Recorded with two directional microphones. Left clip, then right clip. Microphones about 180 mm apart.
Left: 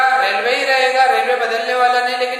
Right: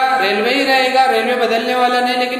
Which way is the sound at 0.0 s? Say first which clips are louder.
Even; 20° right (ahead or behind).